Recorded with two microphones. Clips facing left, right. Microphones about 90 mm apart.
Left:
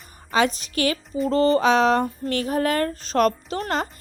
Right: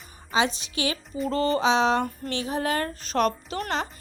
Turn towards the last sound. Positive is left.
turn(degrees=40)  # may be behind; listen again after turning